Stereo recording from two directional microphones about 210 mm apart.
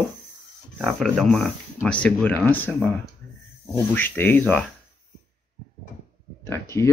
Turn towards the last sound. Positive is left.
turn(degrees=15)  # may be behind; listen again after turning